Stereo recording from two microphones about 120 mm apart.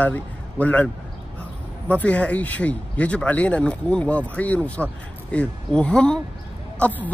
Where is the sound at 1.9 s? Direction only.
10° left (ahead or behind).